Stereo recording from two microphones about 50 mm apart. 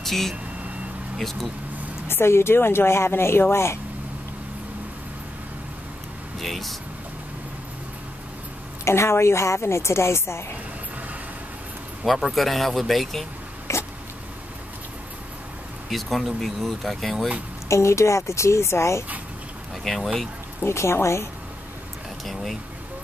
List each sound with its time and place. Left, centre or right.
0.0 s speech: centre
2.0 s a woman's voice: left
6.4 s speech: centre
8.8 s a woman's voice: left
12.0 s speech: centre
13.7 s a sound: left
15.9 s speech: centre
17.6 s a woman's voice: left
19.8 s speech: centre
20.6 s a woman's voice: left
22.2 s speech: centre